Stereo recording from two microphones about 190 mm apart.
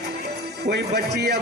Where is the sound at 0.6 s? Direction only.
60° right (ahead or behind).